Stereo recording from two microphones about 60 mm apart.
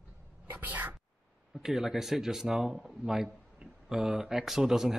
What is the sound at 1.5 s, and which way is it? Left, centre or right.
Speech, centre.